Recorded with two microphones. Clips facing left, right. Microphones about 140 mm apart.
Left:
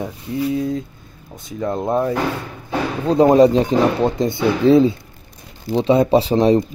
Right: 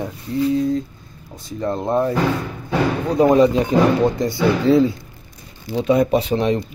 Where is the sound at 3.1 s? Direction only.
30° left (ahead or behind).